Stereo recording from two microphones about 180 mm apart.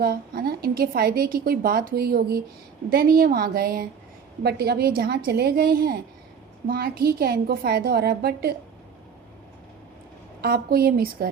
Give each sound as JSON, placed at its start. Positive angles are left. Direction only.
{"t": 0.0, "sound": "a woman's voice", "side_deg": -55}
{"t": 10.4, "sound": "a woman's voice", "side_deg": -60}